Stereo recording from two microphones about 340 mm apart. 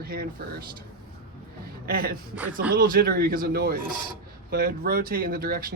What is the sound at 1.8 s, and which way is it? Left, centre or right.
Speech, right.